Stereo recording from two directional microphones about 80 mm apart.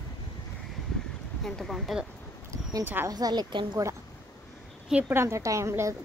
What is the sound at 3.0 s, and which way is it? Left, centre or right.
Speech, right.